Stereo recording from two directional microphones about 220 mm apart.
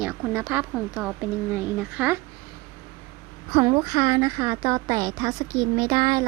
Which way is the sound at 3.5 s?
20° right (ahead or behind).